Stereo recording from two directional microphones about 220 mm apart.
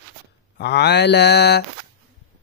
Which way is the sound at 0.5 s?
50° left (ahead or behind).